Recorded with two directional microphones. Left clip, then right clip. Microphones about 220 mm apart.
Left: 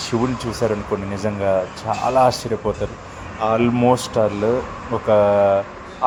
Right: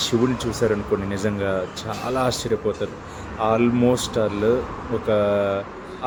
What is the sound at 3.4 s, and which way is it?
A man's voice, centre (ahead or behind).